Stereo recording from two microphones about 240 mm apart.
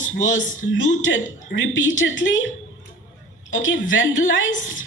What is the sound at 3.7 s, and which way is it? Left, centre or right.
Speech, left.